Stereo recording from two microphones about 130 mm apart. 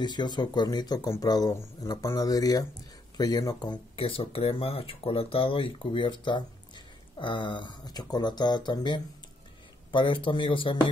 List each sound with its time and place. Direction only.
0.0 s speech: 35° left (ahead or behind)